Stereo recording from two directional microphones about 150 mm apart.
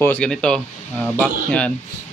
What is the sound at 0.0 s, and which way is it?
Speech, 10° left (ahead or behind).